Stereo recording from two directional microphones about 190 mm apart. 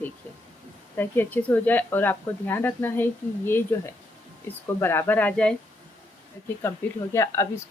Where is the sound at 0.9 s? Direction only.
10° left (ahead or behind).